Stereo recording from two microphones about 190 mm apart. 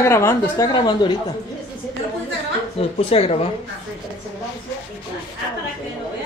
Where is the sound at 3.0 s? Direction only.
30° left (ahead or behind).